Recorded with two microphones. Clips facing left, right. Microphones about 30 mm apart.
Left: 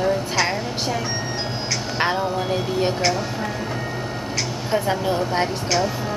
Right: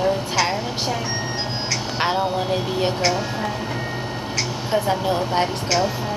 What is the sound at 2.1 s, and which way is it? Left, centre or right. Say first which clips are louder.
Speech: right 1 dB; centre.